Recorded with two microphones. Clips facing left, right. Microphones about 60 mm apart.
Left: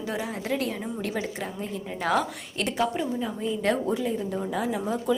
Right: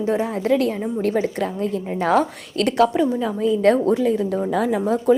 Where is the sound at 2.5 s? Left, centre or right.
Right.